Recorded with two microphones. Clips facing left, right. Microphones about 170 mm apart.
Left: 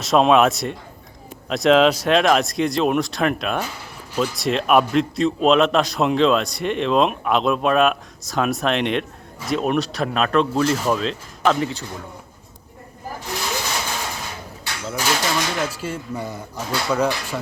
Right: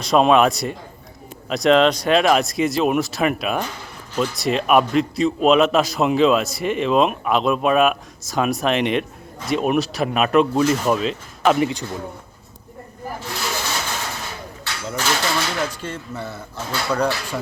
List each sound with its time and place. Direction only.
0.0 s a man's voice: centre (ahead or behind); by 11.9 s 15° right (ahead or behind)
14.8 s speech: 10° left (ahead or behind)